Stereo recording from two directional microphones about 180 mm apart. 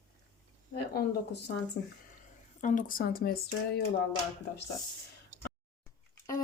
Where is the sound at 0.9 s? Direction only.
70° left (ahead or behind).